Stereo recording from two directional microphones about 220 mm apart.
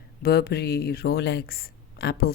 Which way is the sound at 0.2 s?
45° left (ahead or behind).